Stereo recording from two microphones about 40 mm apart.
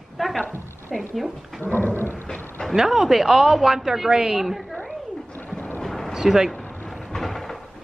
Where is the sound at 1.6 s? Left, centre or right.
Left.